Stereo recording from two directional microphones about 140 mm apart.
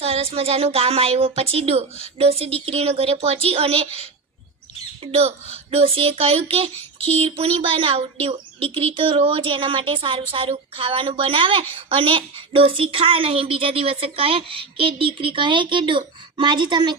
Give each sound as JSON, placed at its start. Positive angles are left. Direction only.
{"t": 0.0, "sound": "speech", "side_deg": -45}
{"t": 5.7, "sound": "speech", "side_deg": -45}